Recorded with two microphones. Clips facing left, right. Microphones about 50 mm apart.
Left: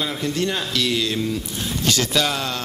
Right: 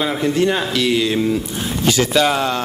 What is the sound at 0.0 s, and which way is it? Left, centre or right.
A man's voice, centre.